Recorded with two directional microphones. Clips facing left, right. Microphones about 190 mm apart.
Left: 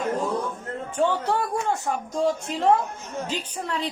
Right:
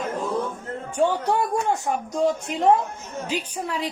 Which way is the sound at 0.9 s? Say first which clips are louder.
Right 2 dB; 15° right (ahead or behind).